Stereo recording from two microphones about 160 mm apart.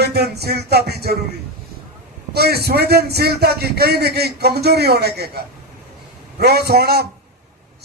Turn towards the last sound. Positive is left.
turn(degrees=-85)